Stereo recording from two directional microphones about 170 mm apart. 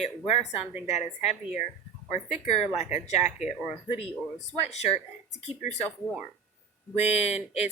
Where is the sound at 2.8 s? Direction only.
40° left (ahead or behind).